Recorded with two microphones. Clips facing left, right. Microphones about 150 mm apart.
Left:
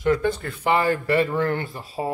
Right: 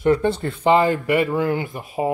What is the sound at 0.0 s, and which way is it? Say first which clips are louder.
Speech: right 3 dB; 30° right (ahead or behind).